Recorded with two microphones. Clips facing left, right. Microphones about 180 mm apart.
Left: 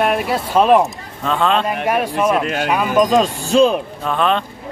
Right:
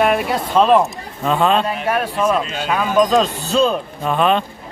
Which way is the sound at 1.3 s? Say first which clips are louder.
Right 1 dB; 5° right (ahead or behind).